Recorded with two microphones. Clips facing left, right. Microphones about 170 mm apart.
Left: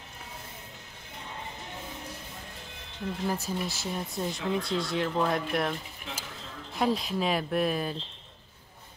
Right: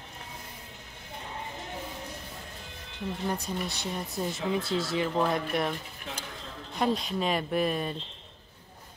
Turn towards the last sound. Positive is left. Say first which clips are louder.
# even
turn(degrees=0)  # may be behind; listen again after turning